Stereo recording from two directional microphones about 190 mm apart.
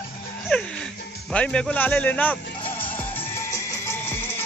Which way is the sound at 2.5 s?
30° left (ahead or behind).